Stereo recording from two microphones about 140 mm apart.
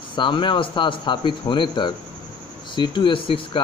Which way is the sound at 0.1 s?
35° left (ahead or behind).